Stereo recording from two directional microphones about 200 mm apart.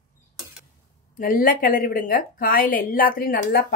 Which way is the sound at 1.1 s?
45° left (ahead or behind).